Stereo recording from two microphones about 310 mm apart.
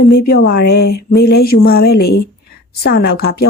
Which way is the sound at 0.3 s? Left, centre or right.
Left.